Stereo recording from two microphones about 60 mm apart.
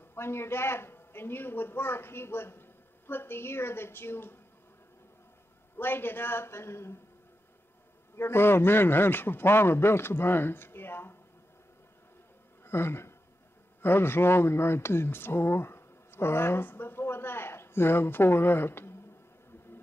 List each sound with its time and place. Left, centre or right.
0.1 s speech: left
5.8 s speech: left
8.2 s speech: left
12.6 s speech: left